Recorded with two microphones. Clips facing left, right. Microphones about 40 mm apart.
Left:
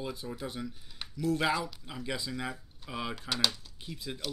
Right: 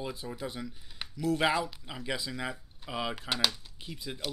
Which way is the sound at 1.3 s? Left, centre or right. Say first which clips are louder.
Right 2 dB; right.